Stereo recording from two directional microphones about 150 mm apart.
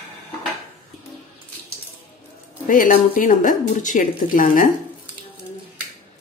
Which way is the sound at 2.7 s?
65° left (ahead or behind).